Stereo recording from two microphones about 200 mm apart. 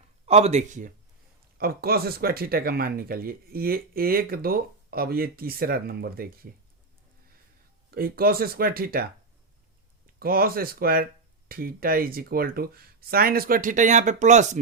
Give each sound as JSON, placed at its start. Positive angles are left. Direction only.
{"t": 0.3, "sound": "speech", "side_deg": -30}
{"t": 7.9, "sound": "speech", "side_deg": -50}
{"t": 10.2, "sound": "speech", "side_deg": -50}